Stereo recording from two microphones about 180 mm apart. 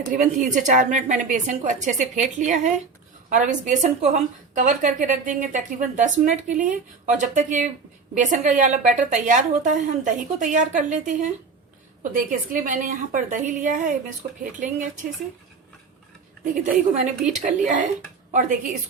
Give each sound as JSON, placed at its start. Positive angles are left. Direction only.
{"t": 0.1, "sound": "a woman's voice", "side_deg": -45}
{"t": 16.4, "sound": "a woman's voice", "side_deg": -45}